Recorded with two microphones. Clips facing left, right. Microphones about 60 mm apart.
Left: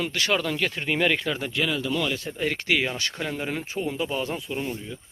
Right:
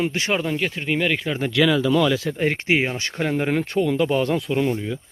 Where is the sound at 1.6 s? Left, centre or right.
Right.